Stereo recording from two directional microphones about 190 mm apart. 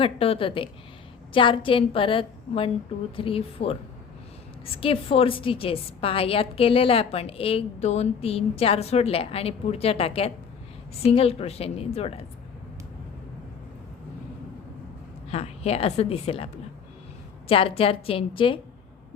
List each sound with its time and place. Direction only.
0.0 s a woman's voice: 30° left (ahead or behind)
15.3 s a woman's voice: 35° left (ahead or behind)
17.5 s a woman's voice: 30° left (ahead or behind)